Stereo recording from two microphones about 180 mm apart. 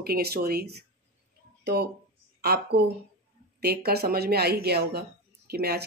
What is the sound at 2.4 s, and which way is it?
Speech, 60° right (ahead or behind).